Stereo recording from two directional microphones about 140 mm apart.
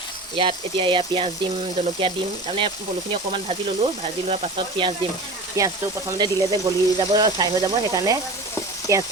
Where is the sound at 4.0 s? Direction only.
50° right (ahead or behind).